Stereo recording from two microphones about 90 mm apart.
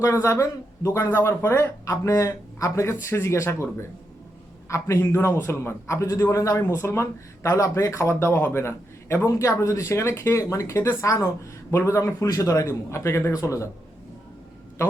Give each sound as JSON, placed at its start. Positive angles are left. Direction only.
{"t": 0.0, "sound": "a man's voice", "side_deg": 35}